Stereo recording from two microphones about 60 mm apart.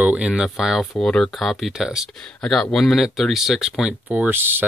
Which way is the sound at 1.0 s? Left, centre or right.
Centre.